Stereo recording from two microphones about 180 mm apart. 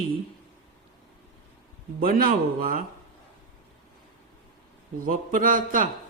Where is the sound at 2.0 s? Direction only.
55° right (ahead or behind).